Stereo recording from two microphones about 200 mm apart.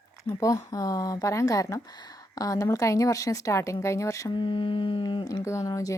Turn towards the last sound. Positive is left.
turn(degrees=15)  # may be behind; listen again after turning